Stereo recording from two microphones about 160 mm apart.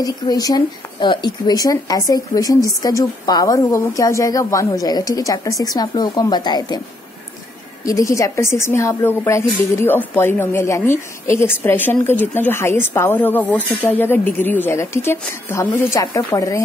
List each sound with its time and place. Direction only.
0.0 s speech: 25° left (ahead or behind)
7.8 s speech: 20° left (ahead or behind)